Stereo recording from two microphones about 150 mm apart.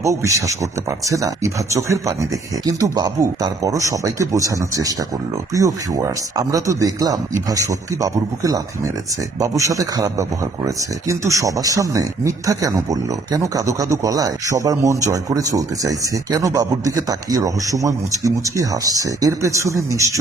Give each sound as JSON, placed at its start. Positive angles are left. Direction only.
{"t": 0.0, "sound": "speech", "side_deg": -20}